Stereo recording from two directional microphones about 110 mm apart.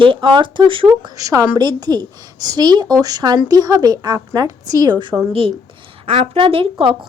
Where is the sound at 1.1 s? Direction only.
30° right (ahead or behind).